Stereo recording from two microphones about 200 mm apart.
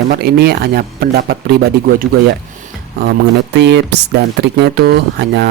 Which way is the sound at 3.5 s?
60° right (ahead or behind).